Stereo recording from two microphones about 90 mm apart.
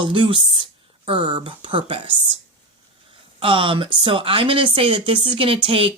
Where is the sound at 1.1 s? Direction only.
75° right (ahead or behind).